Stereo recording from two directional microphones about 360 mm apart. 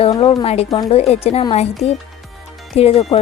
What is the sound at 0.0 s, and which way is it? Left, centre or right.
A woman's voice, centre.